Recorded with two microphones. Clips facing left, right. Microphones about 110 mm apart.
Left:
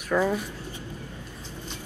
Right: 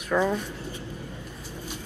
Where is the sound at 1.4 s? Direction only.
10° right (ahead or behind).